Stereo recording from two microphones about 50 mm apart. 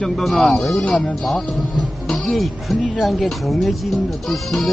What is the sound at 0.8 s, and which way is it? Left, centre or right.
Speech, left.